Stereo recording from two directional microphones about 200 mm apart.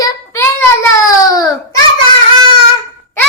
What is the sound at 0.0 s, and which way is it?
Child singing, 15° left (ahead or behind).